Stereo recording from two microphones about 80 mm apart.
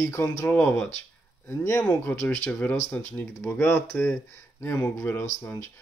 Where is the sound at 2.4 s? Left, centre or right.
Centre.